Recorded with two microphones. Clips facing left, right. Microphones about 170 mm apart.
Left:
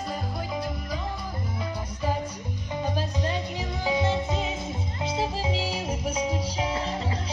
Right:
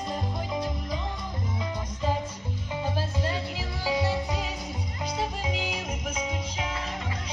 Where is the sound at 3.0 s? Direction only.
20° left (ahead or behind).